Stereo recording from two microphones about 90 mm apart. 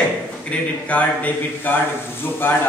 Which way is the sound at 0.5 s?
15° left (ahead or behind).